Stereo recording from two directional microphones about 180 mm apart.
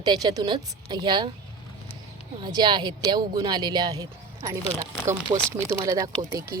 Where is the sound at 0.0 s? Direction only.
20° right (ahead or behind).